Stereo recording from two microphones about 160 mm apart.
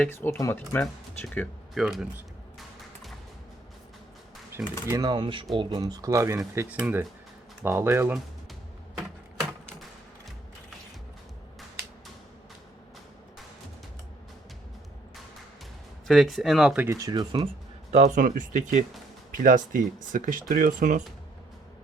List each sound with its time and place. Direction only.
0.0 s speech: 15° left (ahead or behind)
1.7 s music: centre (ahead or behind)
4.9 s speech: 25° right (ahead or behind)
16.0 s speech: centre (ahead or behind); by 17.5 s 30° right (ahead or behind)
17.9 s speech: 50° right (ahead or behind)